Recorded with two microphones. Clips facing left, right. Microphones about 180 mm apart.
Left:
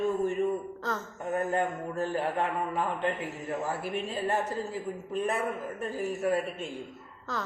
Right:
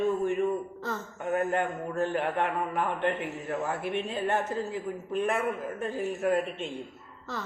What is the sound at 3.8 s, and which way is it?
Speech, 5° left (ahead or behind).